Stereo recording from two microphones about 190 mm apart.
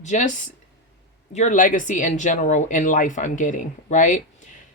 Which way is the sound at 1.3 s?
40° left (ahead or behind).